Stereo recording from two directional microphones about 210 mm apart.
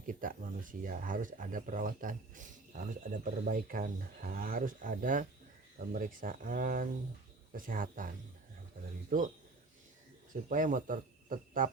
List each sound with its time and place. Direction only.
0.1 s speech: 40° right (ahead or behind)
10.5 s speech: 40° right (ahead or behind)